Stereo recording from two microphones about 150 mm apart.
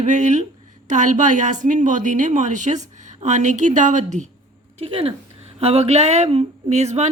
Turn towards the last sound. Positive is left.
turn(degrees=-50)  # may be behind; listen again after turning